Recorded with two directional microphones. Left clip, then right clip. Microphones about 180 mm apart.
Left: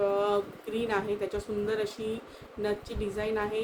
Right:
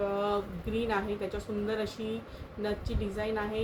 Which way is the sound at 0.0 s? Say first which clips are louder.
Left 4 dB; 35° left (ahead or behind).